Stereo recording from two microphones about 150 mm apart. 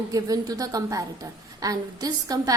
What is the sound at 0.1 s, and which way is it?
A woman's voice, 25° right (ahead or behind).